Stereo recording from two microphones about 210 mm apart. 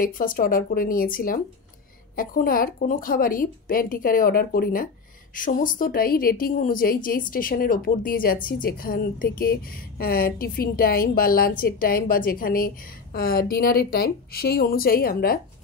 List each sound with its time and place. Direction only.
0.0 s a woman's voice: 40° left (ahead or behind)